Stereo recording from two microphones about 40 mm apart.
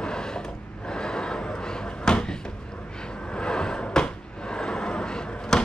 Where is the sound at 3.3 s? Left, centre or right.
Left.